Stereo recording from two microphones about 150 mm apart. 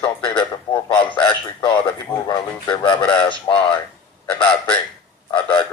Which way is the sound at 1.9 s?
30° left (ahead or behind).